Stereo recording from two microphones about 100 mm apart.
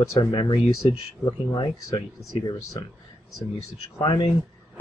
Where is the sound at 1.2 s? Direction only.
40° left (ahead or behind).